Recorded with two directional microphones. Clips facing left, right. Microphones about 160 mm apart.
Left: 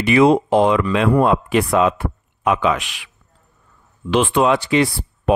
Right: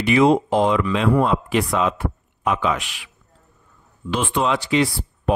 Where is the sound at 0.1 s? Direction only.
65° left (ahead or behind).